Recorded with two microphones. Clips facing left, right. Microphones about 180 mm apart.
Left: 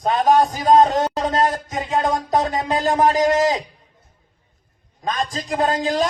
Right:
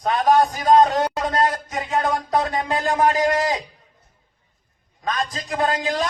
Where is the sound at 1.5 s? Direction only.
45° left (ahead or behind).